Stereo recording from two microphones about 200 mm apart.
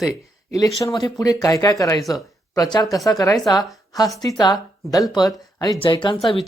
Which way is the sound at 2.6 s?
20° left (ahead or behind).